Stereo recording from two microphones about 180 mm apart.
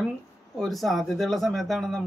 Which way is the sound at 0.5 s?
Centre (ahead or behind).